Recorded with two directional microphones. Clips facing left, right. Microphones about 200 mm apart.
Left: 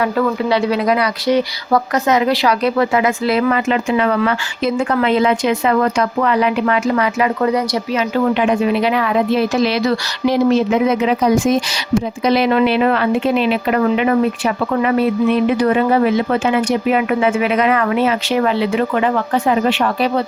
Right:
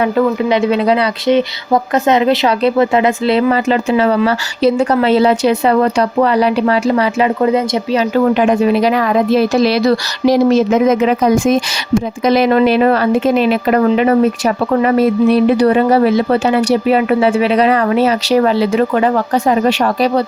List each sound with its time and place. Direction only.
0.0 s speech: 20° right (ahead or behind)
8.3 s speech: 40° right (ahead or behind)